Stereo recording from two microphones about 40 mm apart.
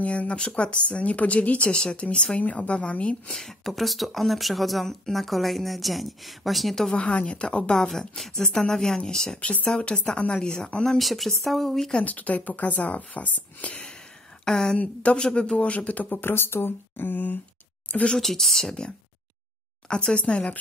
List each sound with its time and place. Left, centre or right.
0.0 s speech: left
1.8 s a woman's voice: left
3.6 s a woman's voice: centre
6.9 s a woman's voice: left
9.4 s a woman's voice: left
10.3 s a woman's voice: centre
11.0 s a woman's voice: centre
12.0 s speech: left
14.4 s speech: centre; by 16.1 s left
16.1 s speech: left
18.2 s a woman's voice: centre
19.9 s a woman's voice: left